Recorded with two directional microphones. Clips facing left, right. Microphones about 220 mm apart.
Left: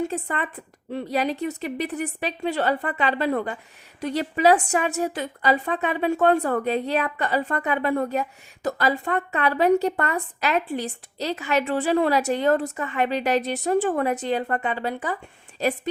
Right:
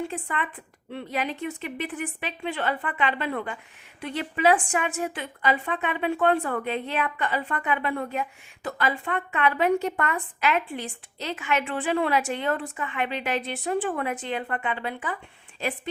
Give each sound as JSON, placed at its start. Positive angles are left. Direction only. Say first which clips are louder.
{"t": 0.0, "sound": "a woman's voice", "louder": "left 4 dB", "side_deg": 40}